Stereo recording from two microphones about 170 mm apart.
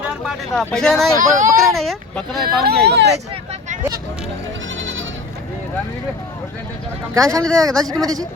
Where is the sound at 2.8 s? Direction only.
80° right.